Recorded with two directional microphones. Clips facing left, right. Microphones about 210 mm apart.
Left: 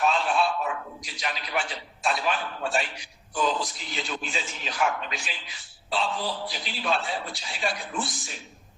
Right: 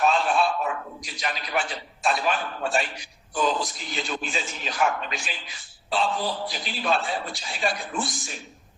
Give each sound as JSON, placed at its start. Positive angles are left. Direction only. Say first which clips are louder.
{"t": 0.0, "sound": "a man's voice", "louder": "right 2 dB", "side_deg": -45}